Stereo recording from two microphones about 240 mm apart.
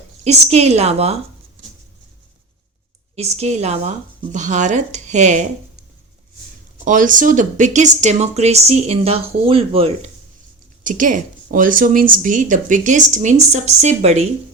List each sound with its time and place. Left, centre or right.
0.3 s speech: right
3.2 s speech: right
6.8 s speech: right